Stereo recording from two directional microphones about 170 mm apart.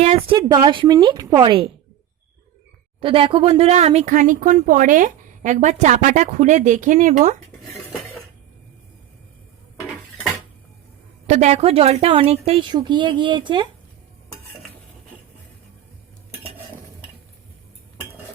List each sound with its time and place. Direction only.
0.0 s a woman's voice: 35° right (ahead or behind)
3.0 s speech: 30° right (ahead or behind)
11.3 s a woman's voice: 40° right (ahead or behind)